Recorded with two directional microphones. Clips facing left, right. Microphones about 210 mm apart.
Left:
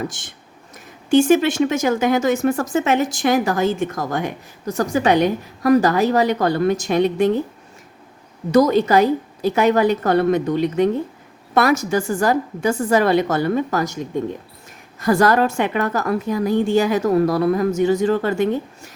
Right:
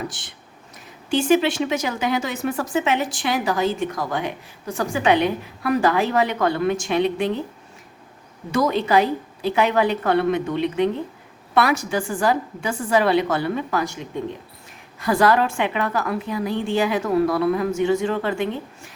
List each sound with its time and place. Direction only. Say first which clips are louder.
1.1 s speech: left 4 dB; 45° left (ahead or behind)
8.5 s a woman's voice: left 5 dB; 40° left (ahead or behind)